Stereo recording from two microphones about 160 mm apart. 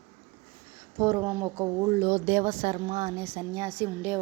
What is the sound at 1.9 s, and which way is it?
Speech, 45° right (ahead or behind).